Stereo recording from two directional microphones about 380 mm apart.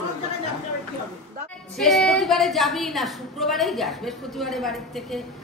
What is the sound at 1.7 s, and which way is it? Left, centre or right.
A woman's voice, centre.